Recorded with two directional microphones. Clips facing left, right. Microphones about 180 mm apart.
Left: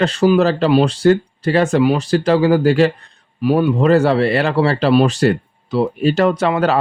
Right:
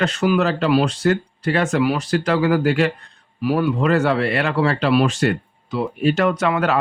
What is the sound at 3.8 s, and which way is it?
Speech, 30° left (ahead or behind).